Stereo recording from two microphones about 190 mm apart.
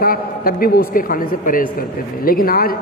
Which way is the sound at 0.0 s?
50° left (ahead or behind).